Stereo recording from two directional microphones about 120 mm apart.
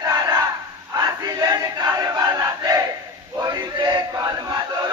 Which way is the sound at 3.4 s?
35° right (ahead or behind).